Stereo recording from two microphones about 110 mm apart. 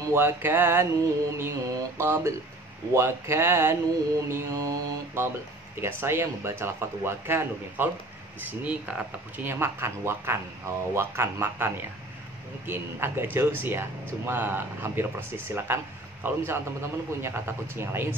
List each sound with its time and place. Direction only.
0.0 s speech: 20° right (ahead or behind)